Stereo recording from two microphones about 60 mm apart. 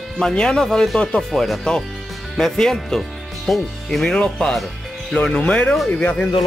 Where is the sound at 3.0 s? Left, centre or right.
Centre.